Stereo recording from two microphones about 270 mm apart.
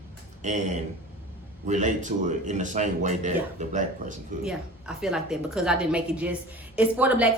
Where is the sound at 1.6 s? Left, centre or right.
Right.